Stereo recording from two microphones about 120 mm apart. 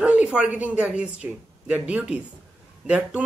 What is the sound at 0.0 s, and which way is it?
Speech, 10° right (ahead or behind).